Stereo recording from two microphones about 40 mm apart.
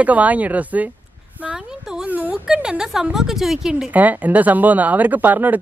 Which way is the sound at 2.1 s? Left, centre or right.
Right.